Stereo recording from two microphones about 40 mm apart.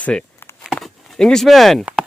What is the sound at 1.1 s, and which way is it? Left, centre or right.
Speech, centre.